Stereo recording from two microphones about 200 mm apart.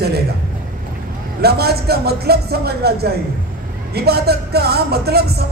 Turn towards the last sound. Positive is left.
turn(degrees=-50)  # may be behind; listen again after turning